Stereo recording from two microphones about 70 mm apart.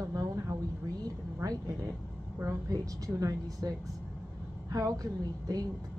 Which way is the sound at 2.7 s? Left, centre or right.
Right.